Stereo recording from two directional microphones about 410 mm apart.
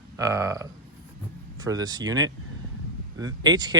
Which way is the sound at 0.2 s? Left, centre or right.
Centre.